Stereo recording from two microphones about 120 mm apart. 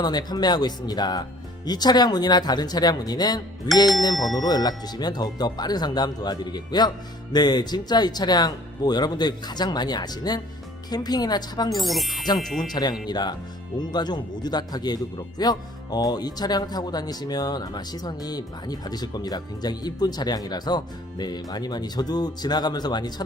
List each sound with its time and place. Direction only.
0.0 s speech: 35° left (ahead or behind)
4.1 s speech: centre (ahead or behind)
4.4 s speech: 35° left (ahead or behind)
11.7 s speech: centre (ahead or behind)
12.7 s speech: 35° left (ahead or behind)